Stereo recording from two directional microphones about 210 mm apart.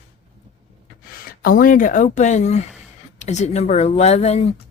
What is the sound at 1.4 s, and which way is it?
A woman's voice, 45° left (ahead or behind).